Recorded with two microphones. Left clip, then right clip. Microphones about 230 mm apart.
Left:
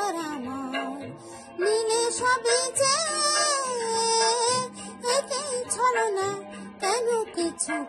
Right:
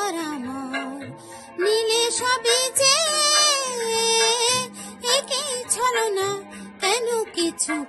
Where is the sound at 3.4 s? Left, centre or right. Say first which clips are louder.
Right 5 dB; right.